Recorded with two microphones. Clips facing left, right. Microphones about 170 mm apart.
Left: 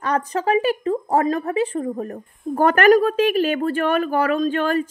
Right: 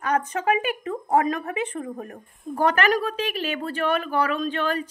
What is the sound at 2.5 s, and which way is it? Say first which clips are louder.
A woman's voice: left 7 dB; 50° left (ahead or behind).